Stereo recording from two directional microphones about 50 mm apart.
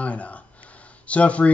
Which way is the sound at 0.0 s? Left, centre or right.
Left.